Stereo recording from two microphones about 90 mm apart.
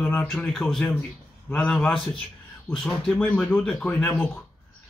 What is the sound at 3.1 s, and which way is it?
Speech, 20° left (ahead or behind).